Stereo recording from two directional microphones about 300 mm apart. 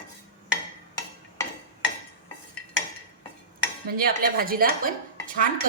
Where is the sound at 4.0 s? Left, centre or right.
Right.